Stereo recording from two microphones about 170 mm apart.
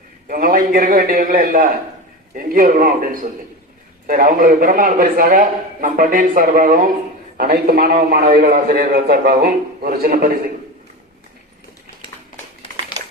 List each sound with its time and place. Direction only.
0.3 s a man's voice: 60° right (ahead or behind)